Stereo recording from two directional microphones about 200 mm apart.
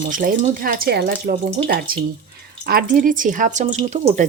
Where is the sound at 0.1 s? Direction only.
45° right (ahead or behind).